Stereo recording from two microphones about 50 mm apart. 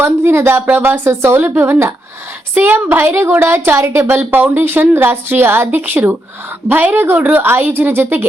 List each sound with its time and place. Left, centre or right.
0.0 s speech: right
1.4 s a woman's voice: right
3.1 s speech: right
4.1 s a woman's voice: right